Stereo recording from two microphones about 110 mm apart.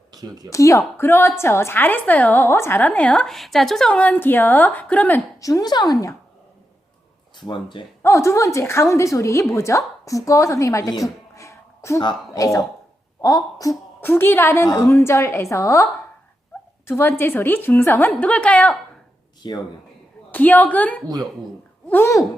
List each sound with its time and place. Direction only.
0.2 s speech: 35° right (ahead or behind)
0.5 s a woman's voice: 30° left (ahead or behind)
5.4 s speech: 30° left (ahead or behind)
7.3 s speech: 45° left (ahead or behind)
8.0 s a woman's voice: 25° left (ahead or behind)
14.0 s a woman's voice: 20° left (ahead or behind)
16.9 s a woman's voice: 20° left (ahead or behind)
19.4 s speech: 40° left (ahead or behind)
20.3 s a woman's voice: 15° left (ahead or behind)